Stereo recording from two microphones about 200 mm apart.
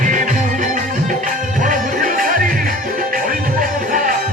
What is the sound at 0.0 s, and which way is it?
Music, 40° right (ahead or behind).